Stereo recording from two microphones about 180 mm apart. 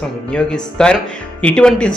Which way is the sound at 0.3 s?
5° left (ahead or behind).